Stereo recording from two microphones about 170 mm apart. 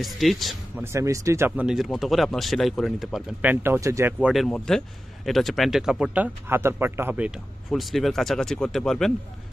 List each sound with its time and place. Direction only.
0.0 s speech: centre (ahead or behind)
0.9 s speech: 15° right (ahead or behind)
1.7 s speech: centre (ahead or behind)
3.6 s speech: 15° right (ahead or behind)
4.2 s speech: centre (ahead or behind)